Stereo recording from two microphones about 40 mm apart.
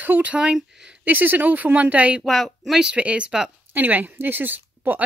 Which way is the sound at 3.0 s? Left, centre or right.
Right.